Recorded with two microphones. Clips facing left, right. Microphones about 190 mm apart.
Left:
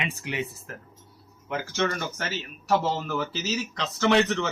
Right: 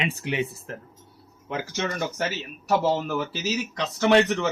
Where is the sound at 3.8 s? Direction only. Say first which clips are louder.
Right 3 dB; 15° right (ahead or behind).